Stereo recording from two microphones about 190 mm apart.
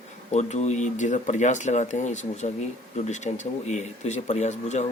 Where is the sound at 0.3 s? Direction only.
35° left (ahead or behind).